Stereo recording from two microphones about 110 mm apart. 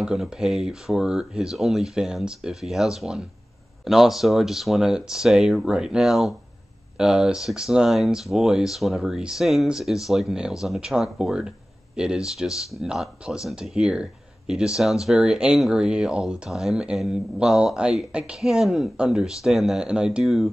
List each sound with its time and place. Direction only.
0.0 s speech: 5° right (ahead or behind)